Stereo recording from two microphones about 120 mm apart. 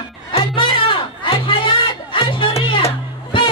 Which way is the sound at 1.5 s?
45° left (ahead or behind).